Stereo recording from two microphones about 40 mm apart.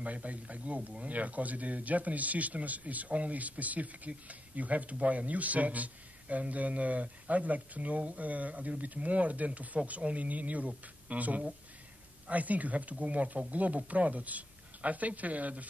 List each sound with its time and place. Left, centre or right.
0.0 s speech: right